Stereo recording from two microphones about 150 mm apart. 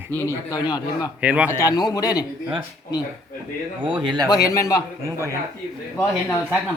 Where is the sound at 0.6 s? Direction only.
25° left (ahead or behind).